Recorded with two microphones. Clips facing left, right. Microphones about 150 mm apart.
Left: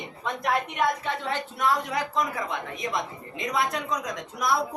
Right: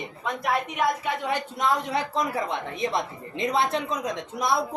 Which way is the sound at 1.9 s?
30° right (ahead or behind).